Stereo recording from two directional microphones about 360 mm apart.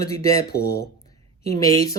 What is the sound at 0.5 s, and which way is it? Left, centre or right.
Speech, left.